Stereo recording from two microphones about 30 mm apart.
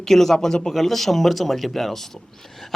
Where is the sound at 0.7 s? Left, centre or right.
Centre.